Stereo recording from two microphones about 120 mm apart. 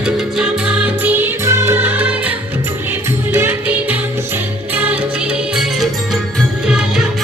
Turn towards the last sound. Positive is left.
turn(degrees=-5)  # may be behind; listen again after turning